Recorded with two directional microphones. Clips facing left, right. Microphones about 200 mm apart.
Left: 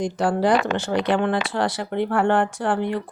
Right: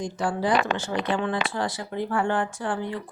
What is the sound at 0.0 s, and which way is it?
Speech, 75° left (ahead or behind).